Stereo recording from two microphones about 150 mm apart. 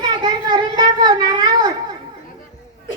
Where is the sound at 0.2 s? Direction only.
30° right (ahead or behind).